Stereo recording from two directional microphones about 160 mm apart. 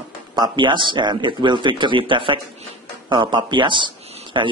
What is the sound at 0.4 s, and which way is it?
A man's voice, 30° right (ahead or behind).